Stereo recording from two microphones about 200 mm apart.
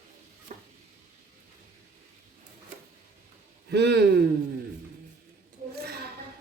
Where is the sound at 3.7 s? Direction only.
55° right (ahead or behind).